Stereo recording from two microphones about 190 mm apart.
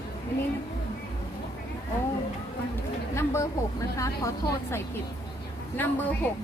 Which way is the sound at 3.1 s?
15° left (ahead or behind).